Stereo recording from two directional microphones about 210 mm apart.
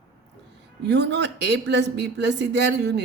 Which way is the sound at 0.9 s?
55° right (ahead or behind).